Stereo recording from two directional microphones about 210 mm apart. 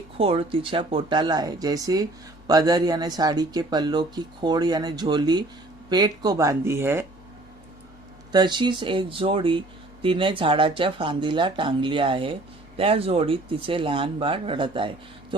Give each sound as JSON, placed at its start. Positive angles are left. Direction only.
{"t": 0.2, "sound": "speech", "side_deg": -25}
{"t": 8.3, "sound": "speech", "side_deg": -20}